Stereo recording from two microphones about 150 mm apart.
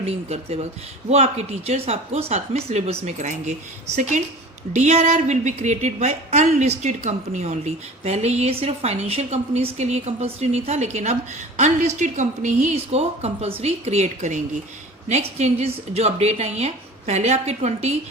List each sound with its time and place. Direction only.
0.0 s a woman's voice: 45° right (ahead or behind)
4.7 s a woman's voice: 50° right (ahead or behind)